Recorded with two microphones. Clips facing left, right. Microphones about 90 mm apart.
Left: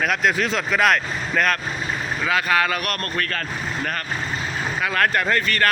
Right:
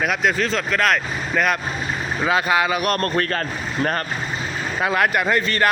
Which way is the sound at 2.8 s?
30° right (ahead or behind).